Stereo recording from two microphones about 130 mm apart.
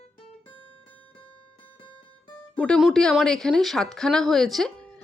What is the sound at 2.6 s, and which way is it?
A woman's voice, 5° left (ahead or behind).